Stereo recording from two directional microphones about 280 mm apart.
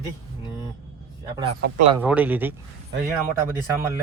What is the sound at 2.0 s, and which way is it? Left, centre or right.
Speech, centre.